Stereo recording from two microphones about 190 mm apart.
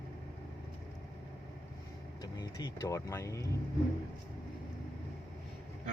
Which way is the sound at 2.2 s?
20° left (ahead or behind).